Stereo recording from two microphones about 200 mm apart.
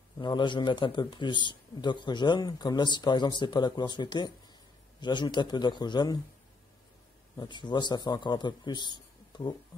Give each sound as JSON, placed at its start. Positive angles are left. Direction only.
{"t": 0.2, "sound": "speech", "side_deg": 25}
{"t": 7.3, "sound": "speech", "side_deg": 20}